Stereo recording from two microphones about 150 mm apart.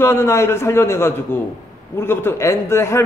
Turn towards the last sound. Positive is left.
turn(degrees=15)  # may be behind; listen again after turning